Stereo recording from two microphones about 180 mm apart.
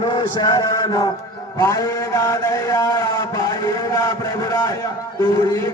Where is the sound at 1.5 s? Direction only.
20° left (ahead or behind).